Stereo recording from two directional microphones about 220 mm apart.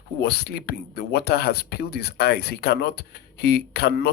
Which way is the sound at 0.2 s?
45° left (ahead or behind).